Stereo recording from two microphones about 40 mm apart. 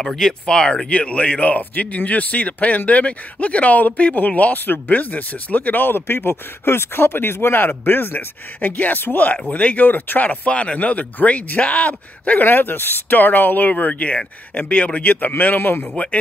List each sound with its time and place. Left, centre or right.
0.0 s speech: centre
0.9 s a man's voice: left
9.5 s a man's voice: left
12.4 s speech: left